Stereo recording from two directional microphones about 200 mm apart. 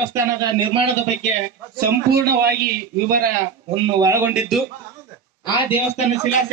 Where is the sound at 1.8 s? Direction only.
50° right (ahead or behind).